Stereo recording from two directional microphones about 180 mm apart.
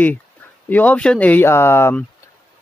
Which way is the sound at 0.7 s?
10° left (ahead or behind).